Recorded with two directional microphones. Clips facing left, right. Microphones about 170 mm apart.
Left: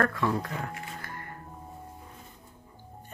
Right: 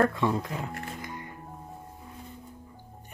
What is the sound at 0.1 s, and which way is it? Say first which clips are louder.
Speech: right 1 dB; 20° right (ahead or behind).